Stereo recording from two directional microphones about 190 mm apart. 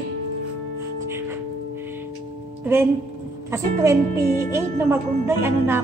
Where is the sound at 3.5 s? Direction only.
15° right (ahead or behind).